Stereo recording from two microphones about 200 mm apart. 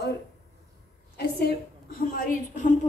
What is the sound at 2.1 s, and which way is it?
Speech, 40° left (ahead or behind).